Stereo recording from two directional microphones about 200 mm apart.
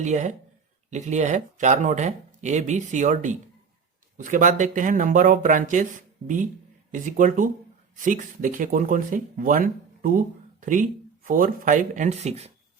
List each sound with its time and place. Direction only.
0.0 s speech: 35° right (ahead or behind)